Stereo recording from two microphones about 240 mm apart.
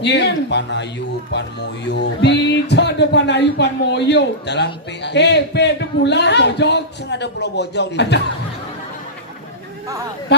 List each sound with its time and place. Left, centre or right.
0.0 s a man's voice: left